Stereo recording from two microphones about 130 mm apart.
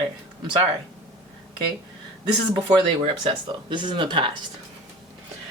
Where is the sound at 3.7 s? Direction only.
40° right (ahead or behind).